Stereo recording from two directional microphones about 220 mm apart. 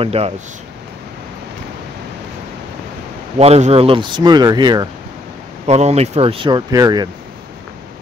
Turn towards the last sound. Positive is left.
turn(degrees=-15)  # may be behind; listen again after turning